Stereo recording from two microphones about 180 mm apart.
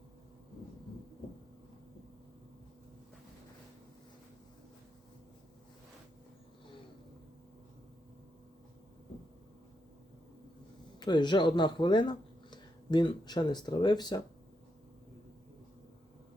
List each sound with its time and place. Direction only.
11.0 s speech: 25° left (ahead or behind)